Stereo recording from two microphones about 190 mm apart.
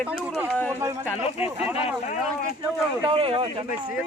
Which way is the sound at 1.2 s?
30° left (ahead or behind).